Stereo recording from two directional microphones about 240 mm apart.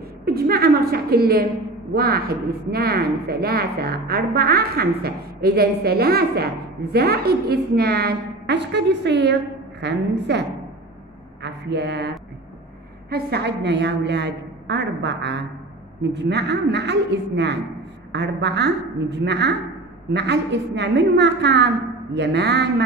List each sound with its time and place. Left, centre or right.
0.2 s a woman's voice: right
11.4 s a woman's voice: right
13.1 s a woman's voice: right